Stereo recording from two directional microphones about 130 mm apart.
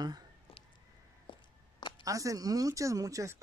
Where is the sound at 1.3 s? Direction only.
35° left (ahead or behind).